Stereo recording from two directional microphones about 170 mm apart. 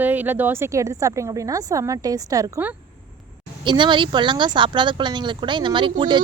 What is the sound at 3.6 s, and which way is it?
Speech, 30° right (ahead or behind).